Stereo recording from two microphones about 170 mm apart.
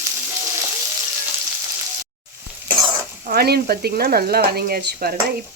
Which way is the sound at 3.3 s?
65° right (ahead or behind).